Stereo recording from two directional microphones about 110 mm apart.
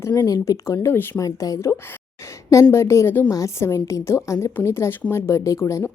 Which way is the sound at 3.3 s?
30° left (ahead or behind).